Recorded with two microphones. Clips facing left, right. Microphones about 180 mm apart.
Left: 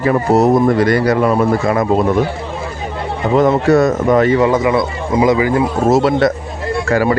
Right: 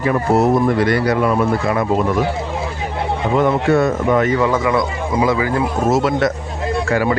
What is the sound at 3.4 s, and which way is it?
Speech, 40° left (ahead or behind).